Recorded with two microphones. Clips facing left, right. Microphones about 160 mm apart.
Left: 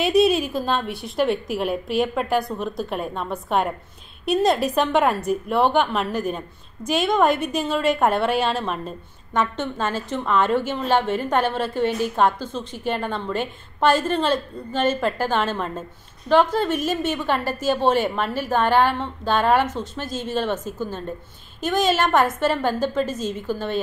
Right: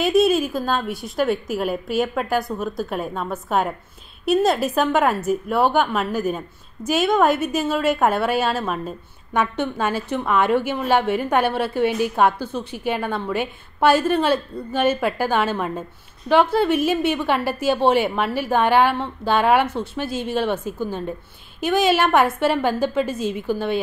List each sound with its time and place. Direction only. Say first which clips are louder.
0.0 s a woman's voice: right 1 dB; centre (ahead or behind)